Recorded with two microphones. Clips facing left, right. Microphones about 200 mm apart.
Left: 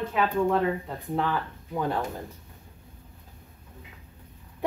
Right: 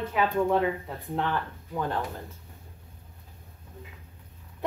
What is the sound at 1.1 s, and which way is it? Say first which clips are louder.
Speech: left 1 dB; 5° left (ahead or behind).